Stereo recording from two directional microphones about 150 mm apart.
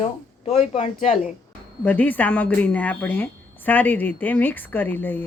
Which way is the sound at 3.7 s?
10° left (ahead or behind).